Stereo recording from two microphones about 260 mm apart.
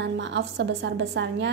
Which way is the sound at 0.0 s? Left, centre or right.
Right.